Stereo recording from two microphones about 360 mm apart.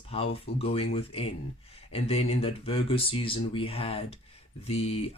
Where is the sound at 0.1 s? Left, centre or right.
Centre.